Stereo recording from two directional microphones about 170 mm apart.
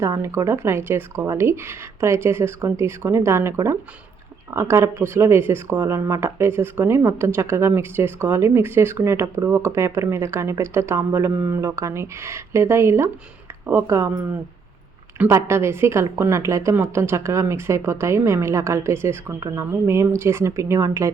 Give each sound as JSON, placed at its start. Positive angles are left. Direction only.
{"t": 0.0, "sound": "speech", "side_deg": -15}
{"t": 15.2, "sound": "speech", "side_deg": -15}